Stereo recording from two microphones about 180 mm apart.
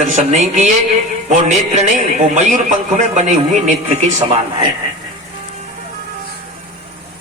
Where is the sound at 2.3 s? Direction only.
45° right (ahead or behind).